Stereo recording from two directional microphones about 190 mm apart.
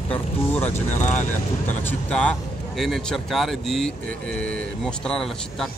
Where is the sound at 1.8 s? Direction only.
10° left (ahead or behind).